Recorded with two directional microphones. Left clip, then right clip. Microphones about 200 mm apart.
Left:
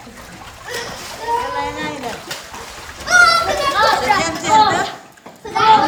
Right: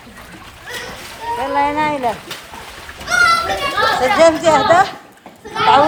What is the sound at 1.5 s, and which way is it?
Boat, 25° right (ahead or behind).